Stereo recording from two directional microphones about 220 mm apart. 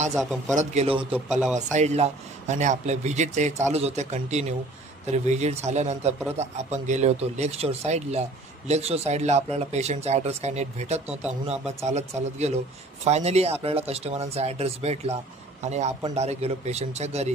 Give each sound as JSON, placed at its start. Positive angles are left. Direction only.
{"t": 0.1, "sound": "speech", "side_deg": 0}
{"t": 0.6, "sound": "a man's voice", "side_deg": -25}